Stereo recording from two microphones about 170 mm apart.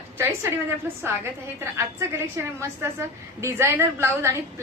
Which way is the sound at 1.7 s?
15° right (ahead or behind).